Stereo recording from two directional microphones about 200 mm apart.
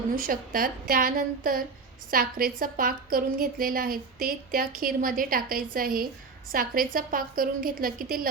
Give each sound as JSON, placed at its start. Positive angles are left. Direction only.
{"t": 0.2, "sound": "a woman's voice", "side_deg": -45}